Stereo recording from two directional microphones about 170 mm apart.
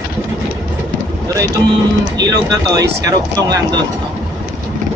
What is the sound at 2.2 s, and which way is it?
Speech, 20° right (ahead or behind).